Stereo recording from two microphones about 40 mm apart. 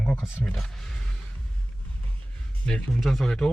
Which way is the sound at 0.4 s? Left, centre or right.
Centre.